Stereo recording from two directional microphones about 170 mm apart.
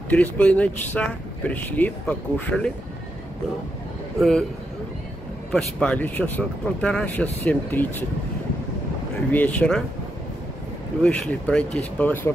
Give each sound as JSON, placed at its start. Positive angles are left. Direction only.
{"t": 0.1, "sound": "speech", "side_deg": 10}
{"t": 4.2, "sound": "speech", "side_deg": 0}
{"t": 5.5, "sound": "speech", "side_deg": 5}
{"t": 9.3, "sound": "speech", "side_deg": 10}
{"t": 11.0, "sound": "speech", "side_deg": 5}